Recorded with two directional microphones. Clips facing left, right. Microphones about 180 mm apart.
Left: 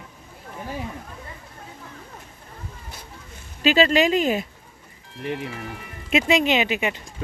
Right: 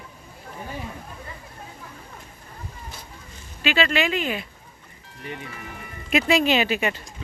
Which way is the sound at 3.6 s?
40° left (ahead or behind).